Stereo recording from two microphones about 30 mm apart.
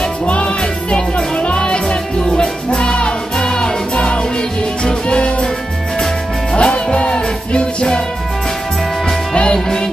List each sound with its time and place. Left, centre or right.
0.3 s music: left
3.9 s music: left
6.5 s music: left
9.3 s music: left